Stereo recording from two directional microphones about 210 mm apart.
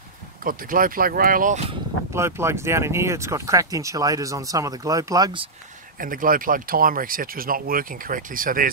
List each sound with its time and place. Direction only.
0.4 s speech: 40° right (ahead or behind)
2.1 s speech: 10° right (ahead or behind)
5.9 s speech: 40° right (ahead or behind)